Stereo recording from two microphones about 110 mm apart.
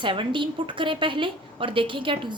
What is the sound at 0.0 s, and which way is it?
A woman's voice, 50° right (ahead or behind).